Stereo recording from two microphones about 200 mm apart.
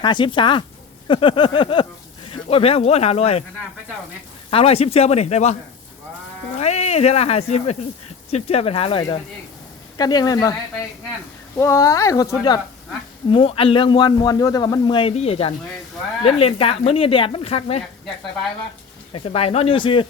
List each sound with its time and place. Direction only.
0.0 s a man's voice: 25° left (ahead or behind)
4.5 s speech: 30° left (ahead or behind)
6.6 s a man's voice: 30° left (ahead or behind)
11.5 s a man's voice: 15° left (ahead or behind); by 17.8 s 30° left (ahead or behind)
19.1 s a man's voice: 30° left (ahead or behind)